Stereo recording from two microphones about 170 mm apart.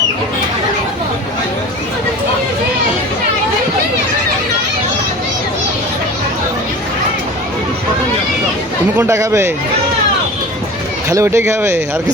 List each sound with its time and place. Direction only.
9.0 s speech: 15° right (ahead or behind)
11.1 s speech: 15° right (ahead or behind)